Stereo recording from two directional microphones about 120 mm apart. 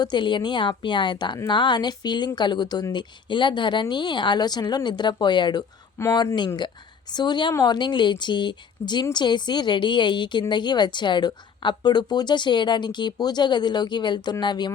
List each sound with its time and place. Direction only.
0.0 s a woman's voice: 40° left (ahead or behind)
6.0 s speech: 20° left (ahead or behind)
7.1 s a woman's voice: 35° left (ahead or behind)